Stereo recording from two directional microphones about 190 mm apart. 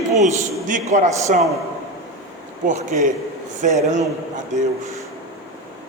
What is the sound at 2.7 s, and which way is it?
A man's voice, 40° right (ahead or behind).